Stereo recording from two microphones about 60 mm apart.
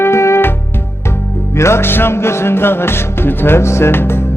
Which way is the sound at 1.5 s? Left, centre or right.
Left.